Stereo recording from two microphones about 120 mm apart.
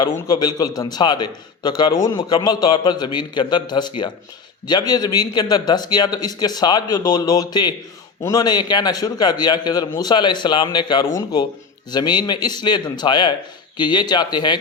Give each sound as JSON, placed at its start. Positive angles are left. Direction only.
{"t": 0.0, "sound": "a man's voice", "side_deg": 40}